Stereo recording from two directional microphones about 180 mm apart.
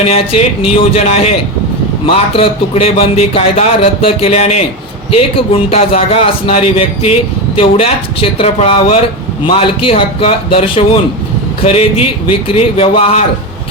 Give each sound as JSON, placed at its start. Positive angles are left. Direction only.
{"t": 0.1, "sound": "speech", "side_deg": 30}